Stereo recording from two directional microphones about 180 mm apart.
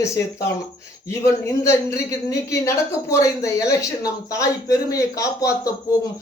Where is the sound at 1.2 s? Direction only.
15° left (ahead or behind).